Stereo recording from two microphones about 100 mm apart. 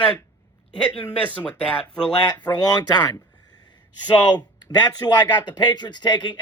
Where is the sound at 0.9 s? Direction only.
15° left (ahead or behind).